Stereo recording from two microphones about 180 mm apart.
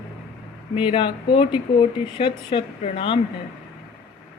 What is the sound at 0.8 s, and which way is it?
Speech, 30° left (ahead or behind).